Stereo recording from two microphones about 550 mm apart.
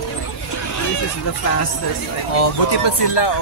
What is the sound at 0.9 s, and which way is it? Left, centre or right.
Speech, left.